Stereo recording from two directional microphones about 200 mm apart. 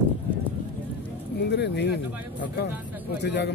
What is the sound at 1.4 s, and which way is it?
A man's voice, 60° left (ahead or behind).